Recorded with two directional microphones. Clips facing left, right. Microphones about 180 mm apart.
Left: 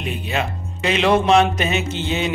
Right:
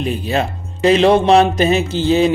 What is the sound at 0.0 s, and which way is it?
Speech, 35° right (ahead or behind).